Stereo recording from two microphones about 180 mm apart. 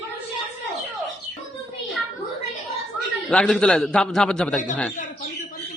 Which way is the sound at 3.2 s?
5° left (ahead or behind).